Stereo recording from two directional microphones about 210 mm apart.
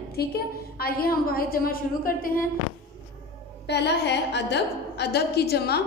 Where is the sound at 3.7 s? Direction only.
55° left (ahead or behind).